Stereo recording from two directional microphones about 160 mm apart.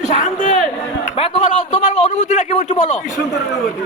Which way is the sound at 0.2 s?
50° left (ahead or behind).